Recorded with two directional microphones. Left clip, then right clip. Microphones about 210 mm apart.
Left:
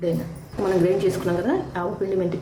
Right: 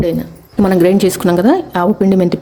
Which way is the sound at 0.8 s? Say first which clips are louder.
Right 9 dB; 55° right (ahead or behind).